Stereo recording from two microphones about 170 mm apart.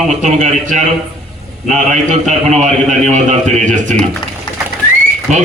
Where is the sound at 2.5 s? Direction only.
45° right (ahead or behind).